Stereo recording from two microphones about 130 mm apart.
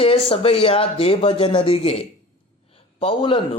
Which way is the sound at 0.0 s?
45° left (ahead or behind).